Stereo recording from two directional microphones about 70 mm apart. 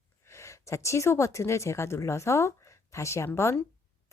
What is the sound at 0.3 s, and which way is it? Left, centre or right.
A woman's voice, left.